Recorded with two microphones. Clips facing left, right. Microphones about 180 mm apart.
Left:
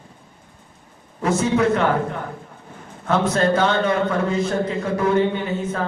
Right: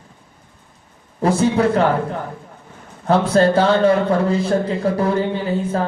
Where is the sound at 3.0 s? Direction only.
35° right (ahead or behind).